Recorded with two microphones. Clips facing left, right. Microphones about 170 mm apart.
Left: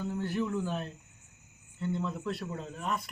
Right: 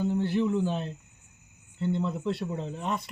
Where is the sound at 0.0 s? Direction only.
25° right (ahead or behind).